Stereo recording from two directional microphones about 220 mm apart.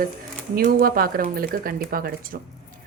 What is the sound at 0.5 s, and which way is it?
Speech, 40° right (ahead or behind).